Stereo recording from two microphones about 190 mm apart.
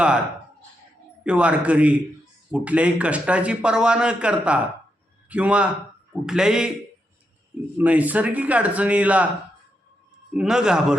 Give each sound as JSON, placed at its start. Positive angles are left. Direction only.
{"t": 1.2, "sound": "a man's voice", "side_deg": -5}
{"t": 7.8, "sound": "speech", "side_deg": -10}
{"t": 10.3, "sound": "a man's voice", "side_deg": -5}